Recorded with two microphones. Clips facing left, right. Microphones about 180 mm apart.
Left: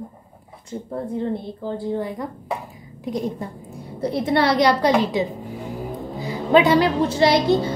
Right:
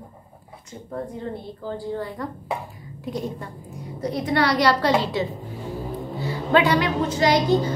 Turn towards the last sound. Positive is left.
turn(degrees=30)  # may be behind; listen again after turning